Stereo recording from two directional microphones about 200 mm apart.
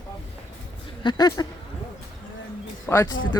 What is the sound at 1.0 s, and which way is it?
Speech, 20° left (ahead or behind).